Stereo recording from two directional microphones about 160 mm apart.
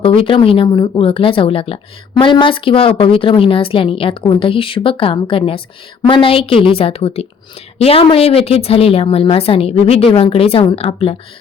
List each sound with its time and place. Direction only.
0.0 s a woman's voice: 35° left (ahead or behind)